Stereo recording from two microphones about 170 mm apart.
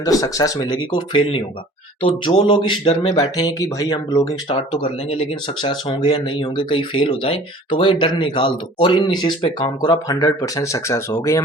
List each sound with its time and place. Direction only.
0.0 s speech: 20° left (ahead or behind)
4.4 s speech: 30° left (ahead or behind)